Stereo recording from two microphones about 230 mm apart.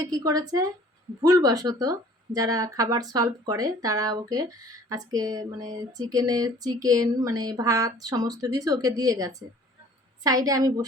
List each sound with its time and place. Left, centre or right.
0.0 s speech: centre